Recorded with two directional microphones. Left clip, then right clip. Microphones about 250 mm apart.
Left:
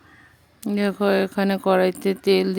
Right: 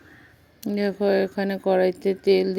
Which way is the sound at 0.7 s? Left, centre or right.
Left.